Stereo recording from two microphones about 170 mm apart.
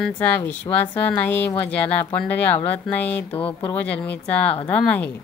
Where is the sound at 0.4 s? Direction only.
10° left (ahead or behind).